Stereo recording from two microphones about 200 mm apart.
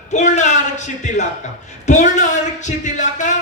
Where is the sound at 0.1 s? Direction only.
35° left (ahead or behind).